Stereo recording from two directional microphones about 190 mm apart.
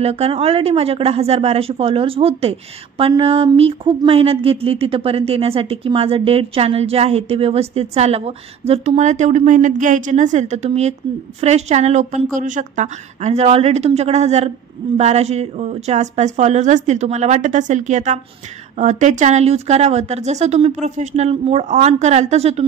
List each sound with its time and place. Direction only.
0.0 s speech: 35° right (ahead or behind)